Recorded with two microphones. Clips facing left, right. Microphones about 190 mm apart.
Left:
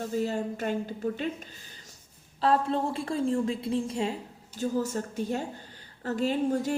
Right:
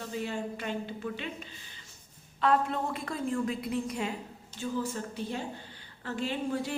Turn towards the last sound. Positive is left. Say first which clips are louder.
# left 6 dB
turn(degrees=45)  # may be behind; listen again after turning